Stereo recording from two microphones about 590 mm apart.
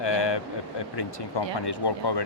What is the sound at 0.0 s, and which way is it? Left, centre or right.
Speech, left.